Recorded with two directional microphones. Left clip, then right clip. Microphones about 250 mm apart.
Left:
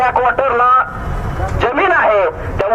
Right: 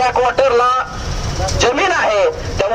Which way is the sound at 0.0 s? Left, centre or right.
Right.